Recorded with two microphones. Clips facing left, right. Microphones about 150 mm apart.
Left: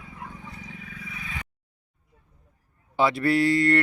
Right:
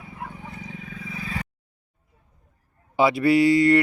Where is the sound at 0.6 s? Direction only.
25° right (ahead or behind).